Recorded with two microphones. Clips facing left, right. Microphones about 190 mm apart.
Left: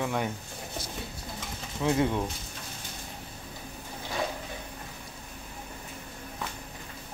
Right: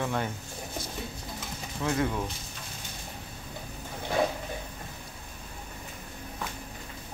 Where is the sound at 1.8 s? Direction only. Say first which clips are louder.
Left 3 dB; 20° left (ahead or behind).